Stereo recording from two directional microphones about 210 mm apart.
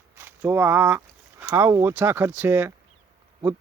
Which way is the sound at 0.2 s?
10° right (ahead or behind).